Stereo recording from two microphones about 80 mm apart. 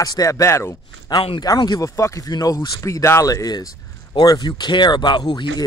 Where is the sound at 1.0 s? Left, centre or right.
Left.